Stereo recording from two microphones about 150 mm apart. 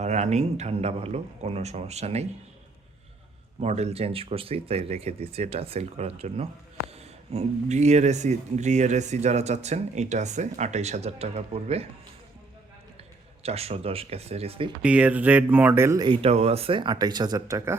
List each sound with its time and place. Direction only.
0.0 s speech: 50° right (ahead or behind)
3.6 s speech: 45° right (ahead or behind)
13.4 s speech: 45° right (ahead or behind)
14.8 s speech: 10° right (ahead or behind)
16.0 s speech: 45° right (ahead or behind); by 17.7 s 25° right (ahead or behind)